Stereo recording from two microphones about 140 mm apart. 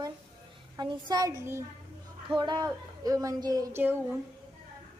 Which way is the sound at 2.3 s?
30° right (ahead or behind).